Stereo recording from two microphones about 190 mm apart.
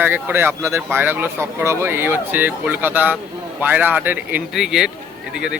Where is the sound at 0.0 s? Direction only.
10° right (ahead or behind).